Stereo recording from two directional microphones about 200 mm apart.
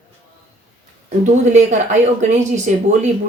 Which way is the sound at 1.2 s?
35° right (ahead or behind).